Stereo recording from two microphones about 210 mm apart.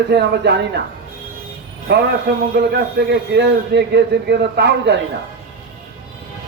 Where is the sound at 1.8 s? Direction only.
55° right (ahead or behind).